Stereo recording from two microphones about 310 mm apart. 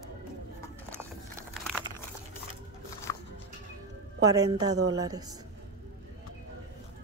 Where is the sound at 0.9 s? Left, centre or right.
Centre.